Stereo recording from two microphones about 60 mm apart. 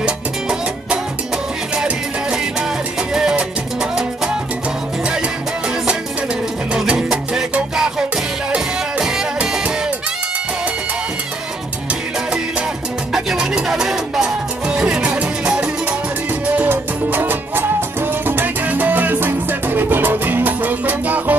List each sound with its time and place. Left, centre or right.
0.0 s music: centre
3.0 s music: centre
8.5 s music: centre
11.9 s music: centre
13.1 s music: centre
16.5 s music: right